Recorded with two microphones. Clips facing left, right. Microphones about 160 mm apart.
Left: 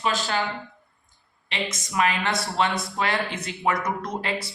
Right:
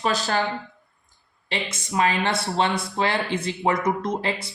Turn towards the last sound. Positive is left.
turn(degrees=-25)  # may be behind; listen again after turning